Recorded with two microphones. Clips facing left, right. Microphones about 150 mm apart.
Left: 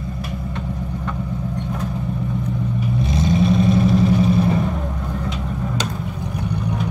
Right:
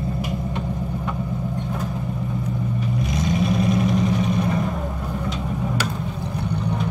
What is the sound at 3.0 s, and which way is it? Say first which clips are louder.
Vehicle: left 5 dB; 25° left (ahead or behind).